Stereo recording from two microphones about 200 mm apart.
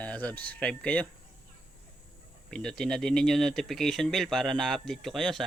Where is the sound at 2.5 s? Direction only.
5° left (ahead or behind).